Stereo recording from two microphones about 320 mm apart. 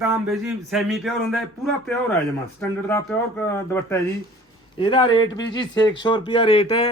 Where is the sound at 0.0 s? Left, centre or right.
Centre.